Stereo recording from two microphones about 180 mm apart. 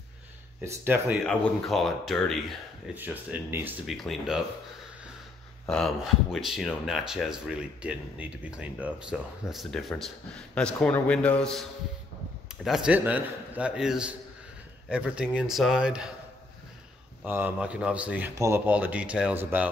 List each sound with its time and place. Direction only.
0.7 s speech: 15° right (ahead or behind)
1.2 s speech: centre (ahead or behind)
2.9 s speech: 10° right (ahead or behind)
3.8 s speech: centre (ahead or behind)
5.7 s speech: centre (ahead or behind)
12.6 s speech: 5° right (ahead or behind)
17.2 s speech: 10° right (ahead or behind)